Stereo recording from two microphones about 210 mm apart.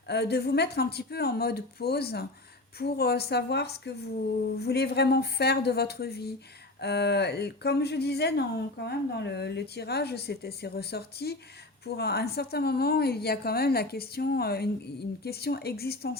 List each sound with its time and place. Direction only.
0.1 s speech: 50° left (ahead or behind)